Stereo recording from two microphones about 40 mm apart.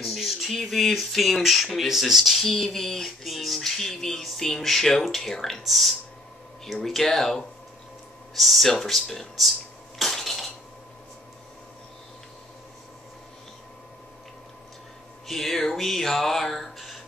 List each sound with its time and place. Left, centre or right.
0.0 s speech: centre
4.4 s a sound: centre
5.6 s speech: centre
6.8 s a sound: centre
8.4 s speech: centre
9.4 s dishes: centre
15.2 s speech: centre
16.7 s music: centre